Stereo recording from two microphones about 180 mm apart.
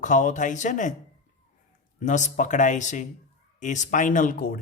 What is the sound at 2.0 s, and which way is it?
Speech, 45° left (ahead or behind).